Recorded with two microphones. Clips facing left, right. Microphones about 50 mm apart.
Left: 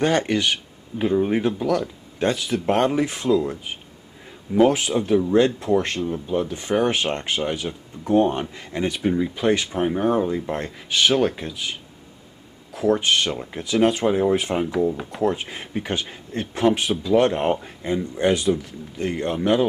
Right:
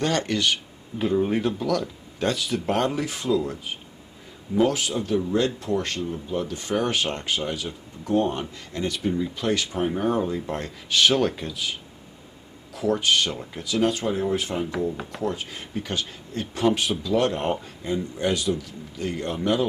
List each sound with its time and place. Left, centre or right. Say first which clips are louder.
0.0 s speech: left 4 dB; centre
4.6 s speech: left 5 dB; left
12.7 s speech: left 4 dB; centre
13.0 s speech: left 1 dB; left